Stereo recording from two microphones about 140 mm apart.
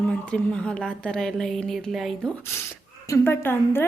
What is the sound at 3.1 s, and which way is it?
Speech, 15° left (ahead or behind).